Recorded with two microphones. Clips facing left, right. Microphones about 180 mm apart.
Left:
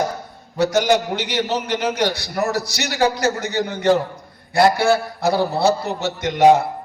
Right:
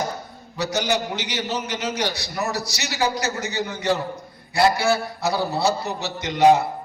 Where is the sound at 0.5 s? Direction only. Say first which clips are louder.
Left 7 dB; 55° left (ahead or behind).